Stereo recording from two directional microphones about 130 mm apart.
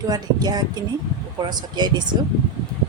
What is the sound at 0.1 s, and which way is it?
Speech, 30° right (ahead or behind).